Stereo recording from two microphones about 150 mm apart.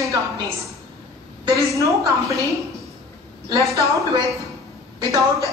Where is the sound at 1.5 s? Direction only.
20° right (ahead or behind).